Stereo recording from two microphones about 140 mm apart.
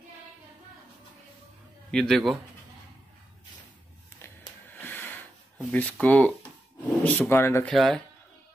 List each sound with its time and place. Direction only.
1.9 s a man's voice: 5° left (ahead or behind)
4.7 s a sound: 15° left (ahead or behind)
5.7 s speech: 10° left (ahead or behind)
7.6 s a man's voice: centre (ahead or behind)